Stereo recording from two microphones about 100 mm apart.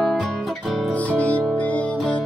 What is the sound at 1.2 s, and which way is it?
Music, 15° left (ahead or behind).